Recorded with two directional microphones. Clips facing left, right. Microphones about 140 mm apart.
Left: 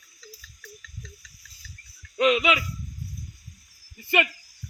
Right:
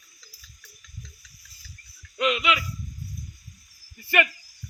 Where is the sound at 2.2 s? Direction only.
40° left (ahead or behind).